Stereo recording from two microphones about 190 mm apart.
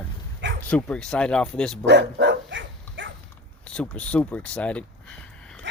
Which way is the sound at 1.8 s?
65° right (ahead or behind).